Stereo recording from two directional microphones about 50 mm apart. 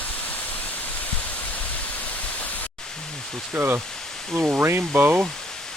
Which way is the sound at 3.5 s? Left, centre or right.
Right.